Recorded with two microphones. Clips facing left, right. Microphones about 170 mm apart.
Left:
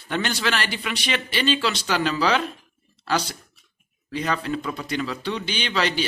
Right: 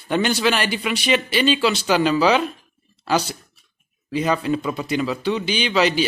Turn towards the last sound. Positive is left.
turn(degrees=-10)  # may be behind; listen again after turning